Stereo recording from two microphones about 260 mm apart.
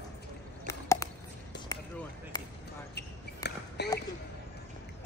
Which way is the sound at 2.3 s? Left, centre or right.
Centre.